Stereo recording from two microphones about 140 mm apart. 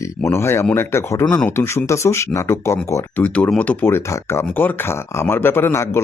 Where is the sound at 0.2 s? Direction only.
15° left (ahead or behind).